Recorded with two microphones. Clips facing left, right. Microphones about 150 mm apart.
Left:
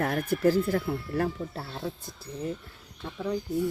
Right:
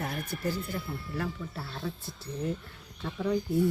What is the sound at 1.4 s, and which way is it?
Speech, 35° left (ahead or behind).